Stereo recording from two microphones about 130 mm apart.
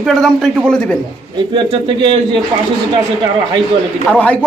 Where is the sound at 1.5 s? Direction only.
40° right (ahead or behind).